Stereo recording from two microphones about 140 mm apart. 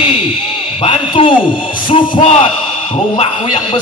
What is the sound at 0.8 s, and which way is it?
Speech, 35° left (ahead or behind).